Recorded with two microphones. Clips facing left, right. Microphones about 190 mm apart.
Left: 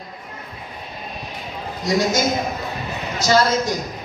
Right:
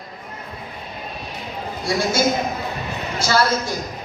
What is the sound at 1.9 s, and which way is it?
Speech, 20° left (ahead or behind).